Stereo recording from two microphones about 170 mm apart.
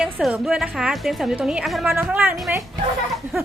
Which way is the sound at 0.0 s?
Centre (ahead or behind).